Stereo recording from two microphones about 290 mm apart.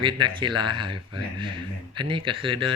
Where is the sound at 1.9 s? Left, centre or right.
Centre.